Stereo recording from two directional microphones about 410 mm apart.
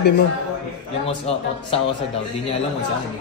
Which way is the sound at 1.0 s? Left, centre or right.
Centre.